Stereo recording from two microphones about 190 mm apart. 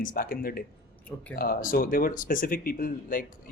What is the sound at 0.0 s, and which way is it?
Speech, 45° left (ahead or behind).